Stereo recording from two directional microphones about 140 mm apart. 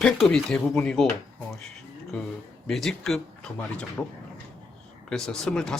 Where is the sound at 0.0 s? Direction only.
5° left (ahead or behind).